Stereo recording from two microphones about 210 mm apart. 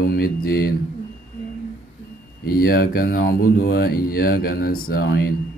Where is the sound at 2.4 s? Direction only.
45° left (ahead or behind).